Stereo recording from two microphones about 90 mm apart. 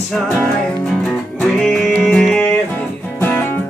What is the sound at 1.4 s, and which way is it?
Music, 5° left (ahead or behind).